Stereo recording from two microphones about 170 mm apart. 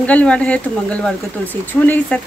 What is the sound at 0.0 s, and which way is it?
Speech, 10° left (ahead or behind).